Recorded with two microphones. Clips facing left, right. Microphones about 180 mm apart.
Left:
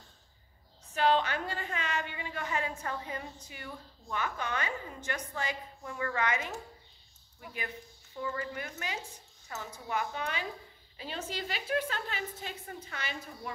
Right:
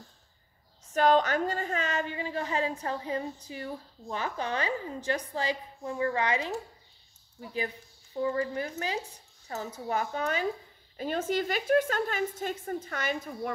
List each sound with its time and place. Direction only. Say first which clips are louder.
0.9 s a woman's voice: right 4 dB; 45° right (ahead or behind)